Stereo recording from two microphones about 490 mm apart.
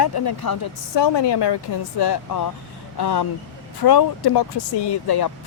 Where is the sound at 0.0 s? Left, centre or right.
Left.